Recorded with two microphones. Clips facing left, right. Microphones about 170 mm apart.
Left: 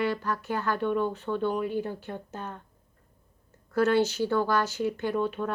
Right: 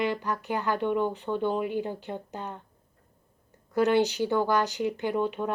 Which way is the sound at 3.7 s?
15° right (ahead or behind).